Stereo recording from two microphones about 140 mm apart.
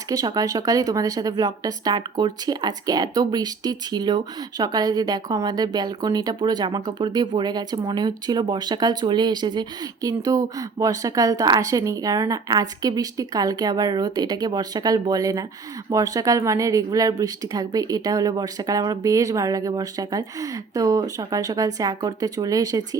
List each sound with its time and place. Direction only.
0.1 s a woman's voice: 25° right (ahead or behind)